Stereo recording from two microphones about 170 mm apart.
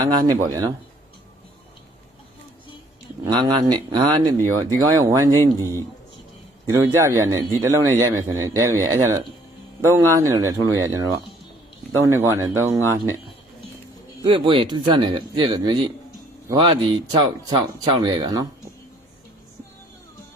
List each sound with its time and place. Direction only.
0.0 s speech: 25° right (ahead or behind)
3.2 s a man's voice: 25° right (ahead or behind)
14.3 s speech: 30° right (ahead or behind)